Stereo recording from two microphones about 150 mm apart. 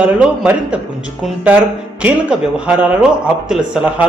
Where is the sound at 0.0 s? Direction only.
5° right (ahead or behind).